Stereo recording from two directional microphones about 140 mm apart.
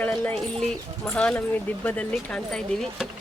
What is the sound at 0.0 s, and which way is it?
Speech, 10° left (ahead or behind).